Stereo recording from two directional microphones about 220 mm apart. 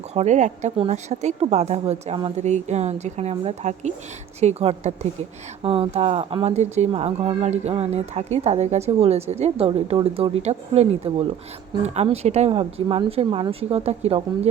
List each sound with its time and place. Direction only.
0.1 s speech: 30° right (ahead or behind)